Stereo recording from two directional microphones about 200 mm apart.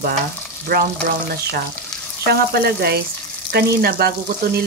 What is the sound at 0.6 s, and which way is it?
Speech, 50° right (ahead or behind).